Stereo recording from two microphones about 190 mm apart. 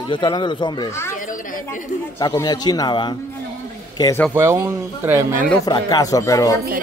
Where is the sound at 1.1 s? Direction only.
45° left (ahead or behind).